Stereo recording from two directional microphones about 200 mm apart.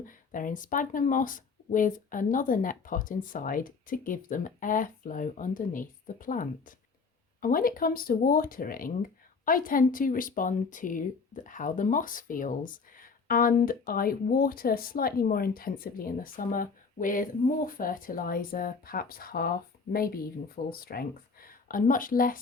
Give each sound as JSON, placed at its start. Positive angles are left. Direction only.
{"t": 0.0, "sound": "speech", "side_deg": 40}